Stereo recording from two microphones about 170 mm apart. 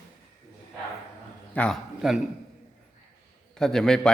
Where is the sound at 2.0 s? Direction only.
5° right (ahead or behind).